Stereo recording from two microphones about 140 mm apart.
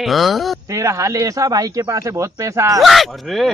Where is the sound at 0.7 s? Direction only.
20° right (ahead or behind).